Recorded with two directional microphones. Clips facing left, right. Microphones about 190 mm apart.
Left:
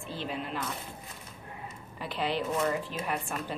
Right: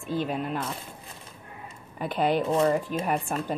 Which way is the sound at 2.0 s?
50° right (ahead or behind).